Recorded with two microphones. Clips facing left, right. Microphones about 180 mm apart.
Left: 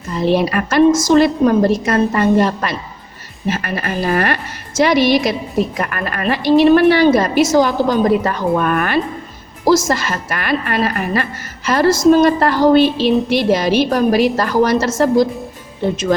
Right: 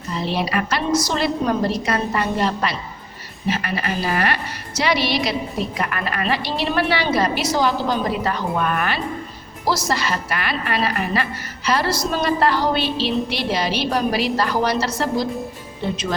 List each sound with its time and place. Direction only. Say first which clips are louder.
0.1 s a woman's voice: left 7 dB; 50° left (ahead or behind)